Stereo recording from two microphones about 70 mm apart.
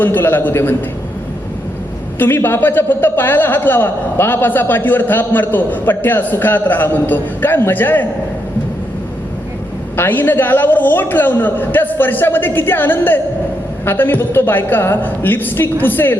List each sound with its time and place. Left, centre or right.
0.0 s a man's voice: left
2.1 s a man's voice: left
10.0 s a man's voice: left